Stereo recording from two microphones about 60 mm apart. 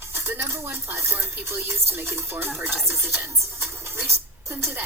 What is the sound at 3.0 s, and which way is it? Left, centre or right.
Music, right.